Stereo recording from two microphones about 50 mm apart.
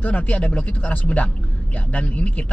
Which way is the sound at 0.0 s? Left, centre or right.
Left.